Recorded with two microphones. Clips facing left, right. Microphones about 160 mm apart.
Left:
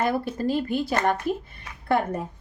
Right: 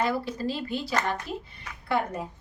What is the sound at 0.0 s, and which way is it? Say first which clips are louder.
A woman's voice: left 3 dB; 50° left (ahead or behind).